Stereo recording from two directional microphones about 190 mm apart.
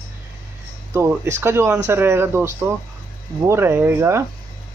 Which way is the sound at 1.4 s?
10° right (ahead or behind).